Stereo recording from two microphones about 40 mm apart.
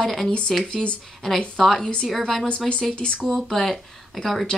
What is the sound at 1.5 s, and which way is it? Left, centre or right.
Speech, centre.